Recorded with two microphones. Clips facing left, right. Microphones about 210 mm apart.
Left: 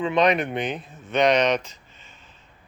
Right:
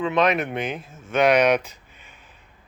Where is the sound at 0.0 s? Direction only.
Centre (ahead or behind).